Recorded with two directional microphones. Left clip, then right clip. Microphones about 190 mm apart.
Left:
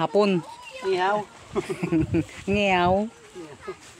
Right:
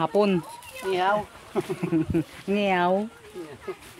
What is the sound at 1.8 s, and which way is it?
Speech, 45° left (ahead or behind).